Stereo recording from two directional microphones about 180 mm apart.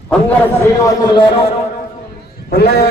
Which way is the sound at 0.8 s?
20° left (ahead or behind).